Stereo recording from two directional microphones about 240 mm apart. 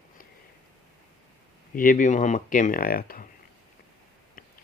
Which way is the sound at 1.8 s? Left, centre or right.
Left.